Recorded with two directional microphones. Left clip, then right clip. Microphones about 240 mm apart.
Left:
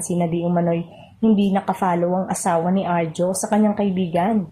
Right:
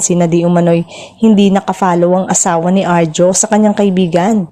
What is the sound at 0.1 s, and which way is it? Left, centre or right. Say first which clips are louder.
Speech: right 9 dB; right.